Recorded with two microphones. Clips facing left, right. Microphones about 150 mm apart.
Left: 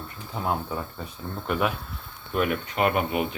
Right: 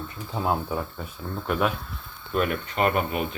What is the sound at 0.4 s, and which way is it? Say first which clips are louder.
Speech: right 2 dB; 20° right (ahead or behind).